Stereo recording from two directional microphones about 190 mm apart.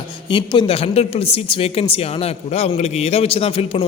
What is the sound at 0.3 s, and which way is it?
A man's voice, 25° left (ahead or behind).